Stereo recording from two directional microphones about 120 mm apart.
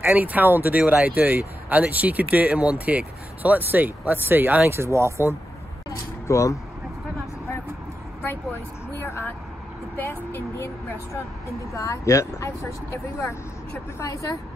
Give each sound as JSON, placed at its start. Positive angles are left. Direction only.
{"t": 0.0, "sound": "speech", "side_deg": -15}
{"t": 5.9, "sound": "vehicle", "side_deg": 25}
{"t": 9.0, "sound": "vehicle", "side_deg": 20}
{"t": 9.9, "sound": "speech", "side_deg": 20}
{"t": 13.9, "sound": "speech", "side_deg": 25}